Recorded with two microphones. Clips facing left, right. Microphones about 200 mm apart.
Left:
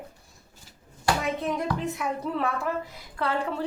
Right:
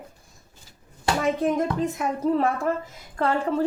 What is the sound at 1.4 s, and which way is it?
A woman's voice, 45° right (ahead or behind).